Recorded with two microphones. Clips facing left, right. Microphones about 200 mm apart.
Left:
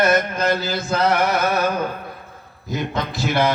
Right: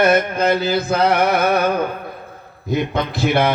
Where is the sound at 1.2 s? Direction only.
60° right (ahead or behind).